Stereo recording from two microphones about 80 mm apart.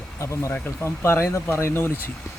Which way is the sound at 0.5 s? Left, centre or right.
Left.